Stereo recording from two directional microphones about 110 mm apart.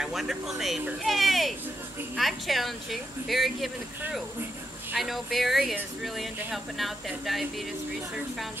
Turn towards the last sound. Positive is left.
turn(degrees=0)  # may be behind; listen again after turning